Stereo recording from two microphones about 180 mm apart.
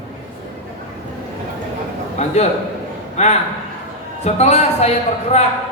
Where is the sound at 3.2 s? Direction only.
40° left (ahead or behind).